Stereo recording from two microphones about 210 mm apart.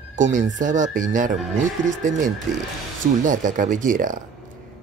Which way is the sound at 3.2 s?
40° right (ahead or behind).